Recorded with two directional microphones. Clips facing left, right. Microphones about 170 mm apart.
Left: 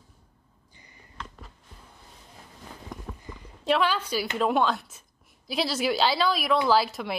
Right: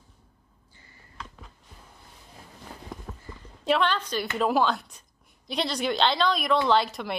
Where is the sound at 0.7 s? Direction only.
15° left (ahead or behind).